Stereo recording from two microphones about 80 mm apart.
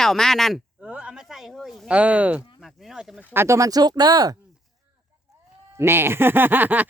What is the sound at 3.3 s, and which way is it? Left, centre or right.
Speech, right.